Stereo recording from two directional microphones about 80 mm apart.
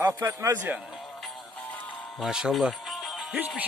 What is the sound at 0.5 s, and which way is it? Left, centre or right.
Speech, right.